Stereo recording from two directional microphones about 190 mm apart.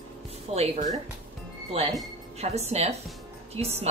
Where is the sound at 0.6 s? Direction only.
35° right (ahead or behind).